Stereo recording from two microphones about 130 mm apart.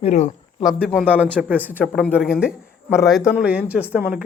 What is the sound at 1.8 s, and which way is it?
Speech, 5° left (ahead or behind).